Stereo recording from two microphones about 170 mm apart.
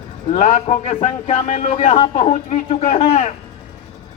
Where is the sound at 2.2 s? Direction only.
40° left (ahead or behind).